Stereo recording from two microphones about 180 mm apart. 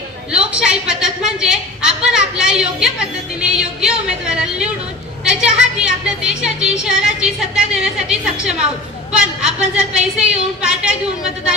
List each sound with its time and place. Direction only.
0.3 s a sound: 5° right (ahead or behind)
5.2 s music: 5° right (ahead or behind)
9.1 s a woman's voice: 5° right (ahead or behind)